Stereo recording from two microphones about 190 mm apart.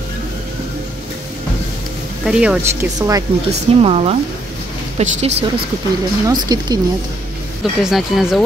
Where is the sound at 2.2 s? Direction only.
5° right (ahead or behind).